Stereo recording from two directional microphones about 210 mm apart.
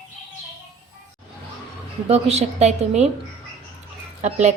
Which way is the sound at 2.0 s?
30° right (ahead or behind).